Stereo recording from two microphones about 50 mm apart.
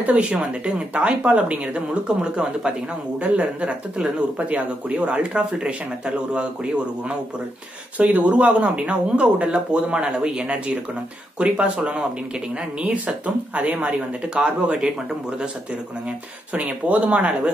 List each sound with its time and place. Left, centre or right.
0.0 s speech: right
8.0 s speech: right
16.5 s speech: right